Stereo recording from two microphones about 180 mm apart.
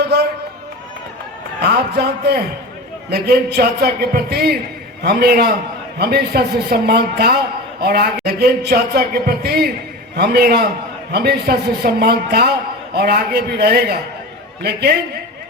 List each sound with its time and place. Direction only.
1.6 s speech: 65° right (ahead or behind)